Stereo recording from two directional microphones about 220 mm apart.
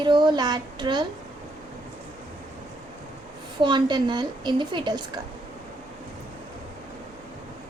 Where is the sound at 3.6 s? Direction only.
20° right (ahead or behind).